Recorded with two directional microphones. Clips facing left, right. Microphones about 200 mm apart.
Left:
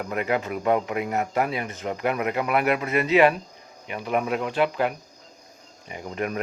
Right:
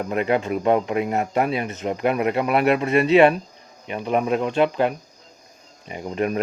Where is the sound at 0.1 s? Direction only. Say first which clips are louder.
Right 4 dB; 25° right (ahead or behind).